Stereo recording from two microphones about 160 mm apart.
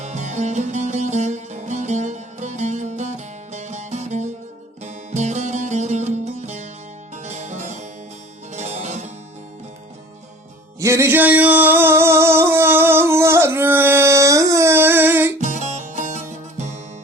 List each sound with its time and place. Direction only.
0.0 s music: 45° right (ahead or behind)
10.8 s music: 15° right (ahead or behind)
15.4 s music: 50° right (ahead or behind)